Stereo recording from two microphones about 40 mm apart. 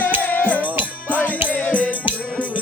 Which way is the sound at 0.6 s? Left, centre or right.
Right.